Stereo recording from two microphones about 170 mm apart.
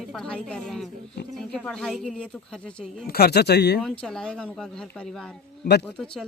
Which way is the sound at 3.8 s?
5° left (ahead or behind).